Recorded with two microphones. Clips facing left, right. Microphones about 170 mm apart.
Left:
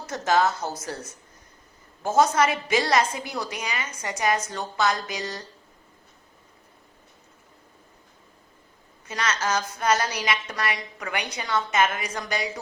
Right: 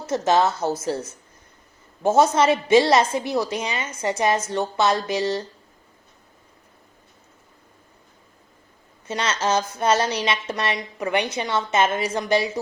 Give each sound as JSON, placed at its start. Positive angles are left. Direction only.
{"t": 0.1, "sound": "a woman's voice", "side_deg": -25}
{"t": 2.0, "sound": "a woman's voice", "side_deg": -25}
{"t": 9.0, "sound": "a woman's voice", "side_deg": -25}